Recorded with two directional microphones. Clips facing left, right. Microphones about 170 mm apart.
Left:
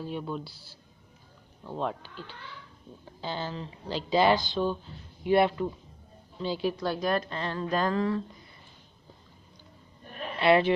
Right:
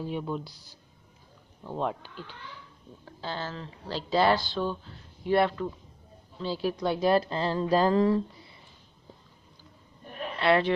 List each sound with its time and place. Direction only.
0.3 s speech: 15° right (ahead or behind)
3.2 s speech: centre (ahead or behind)
6.8 s a woman's voice: 25° right (ahead or behind)
10.4 s speech: 5° left (ahead or behind)